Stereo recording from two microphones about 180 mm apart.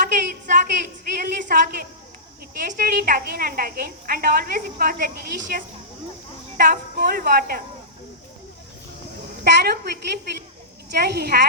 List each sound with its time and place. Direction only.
0.0 s a sound: 50° right (ahead or behind)
1.1 s a woman's voice: 50° right (ahead or behind)
9.4 s a woman's voice: 60° right (ahead or behind)
10.9 s a woman's voice: 60° right (ahead or behind)